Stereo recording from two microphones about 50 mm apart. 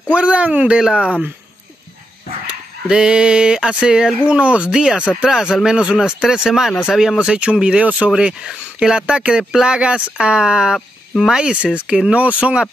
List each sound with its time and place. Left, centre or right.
0.1 s speech: right
0.7 s speech: centre
2.4 s speech: centre
7.2 s speech: right